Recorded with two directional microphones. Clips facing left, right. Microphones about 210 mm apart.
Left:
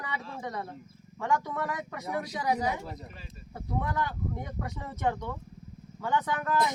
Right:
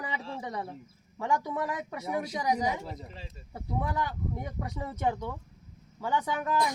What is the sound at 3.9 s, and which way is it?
Speech, 10° right (ahead or behind).